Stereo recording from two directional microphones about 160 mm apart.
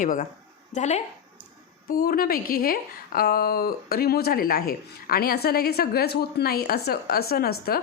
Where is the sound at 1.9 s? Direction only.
65° left (ahead or behind).